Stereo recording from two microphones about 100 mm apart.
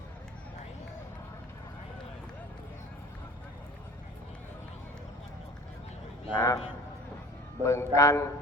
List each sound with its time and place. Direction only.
6.3 s a man's voice: 30° left (ahead or behind)
7.6 s a man's voice: 30° left (ahead or behind)